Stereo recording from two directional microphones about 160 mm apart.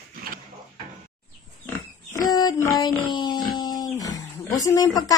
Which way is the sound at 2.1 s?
25° left (ahead or behind).